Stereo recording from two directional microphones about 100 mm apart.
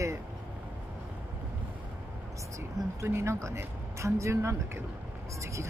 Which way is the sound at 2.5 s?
25° right (ahead or behind).